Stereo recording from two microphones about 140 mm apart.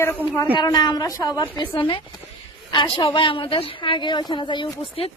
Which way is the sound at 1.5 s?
35° left (ahead or behind).